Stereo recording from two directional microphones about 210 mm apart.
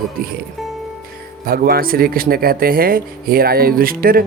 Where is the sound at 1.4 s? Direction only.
45° right (ahead or behind).